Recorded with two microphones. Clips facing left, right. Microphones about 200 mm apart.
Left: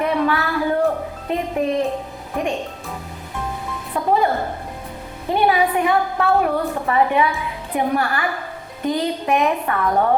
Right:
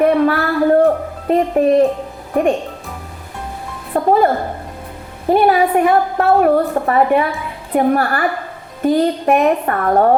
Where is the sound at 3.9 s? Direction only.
55° right (ahead or behind).